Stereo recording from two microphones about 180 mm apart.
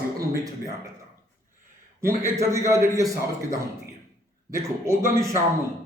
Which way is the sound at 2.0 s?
15° right (ahead or behind).